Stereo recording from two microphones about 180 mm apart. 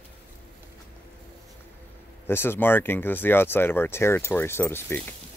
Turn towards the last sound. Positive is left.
turn(degrees=10)  # may be behind; listen again after turning